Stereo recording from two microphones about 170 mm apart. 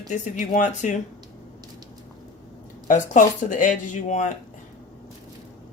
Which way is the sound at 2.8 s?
50° left (ahead or behind).